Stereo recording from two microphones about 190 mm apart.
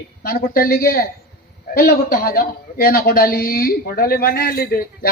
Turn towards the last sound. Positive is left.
turn(degrees=50)  # may be behind; listen again after turning